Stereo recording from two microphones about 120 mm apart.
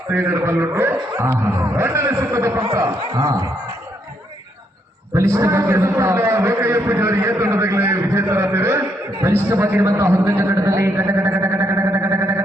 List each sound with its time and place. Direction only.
0.1 s a man's voice: 20° right (ahead or behind)
5.1 s a man's voice: 25° right (ahead or behind)
10.1 s music: 20° right (ahead or behind)